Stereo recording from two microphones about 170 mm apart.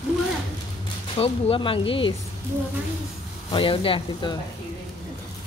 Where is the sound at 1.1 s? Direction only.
35° left (ahead or behind).